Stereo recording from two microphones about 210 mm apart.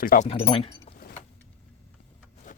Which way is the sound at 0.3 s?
30° left (ahead or behind).